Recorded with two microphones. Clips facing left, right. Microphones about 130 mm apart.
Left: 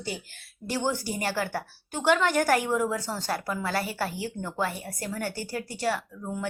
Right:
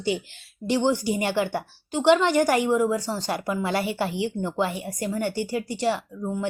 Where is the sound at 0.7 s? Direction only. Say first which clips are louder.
Right 7 dB; 15° right (ahead or behind).